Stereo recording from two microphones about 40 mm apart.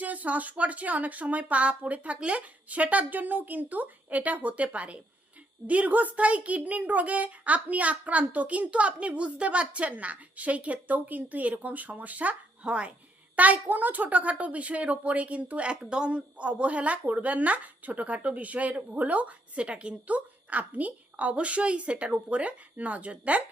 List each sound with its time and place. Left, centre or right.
0.0 s a child's voice: right
12.6 s speech: right
13.3 s a child's voice: right